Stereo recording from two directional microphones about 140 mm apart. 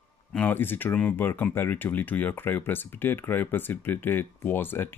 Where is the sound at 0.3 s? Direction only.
10° left (ahead or behind).